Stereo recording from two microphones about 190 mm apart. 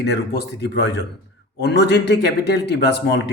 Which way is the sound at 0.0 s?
60° left (ahead or behind).